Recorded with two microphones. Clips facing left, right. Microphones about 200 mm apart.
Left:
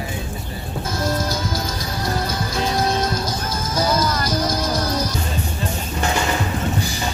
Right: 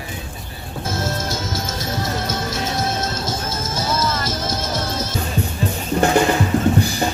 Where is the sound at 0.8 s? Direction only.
25° right (ahead or behind).